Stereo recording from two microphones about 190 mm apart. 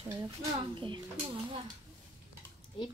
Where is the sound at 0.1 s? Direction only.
20° right (ahead or behind).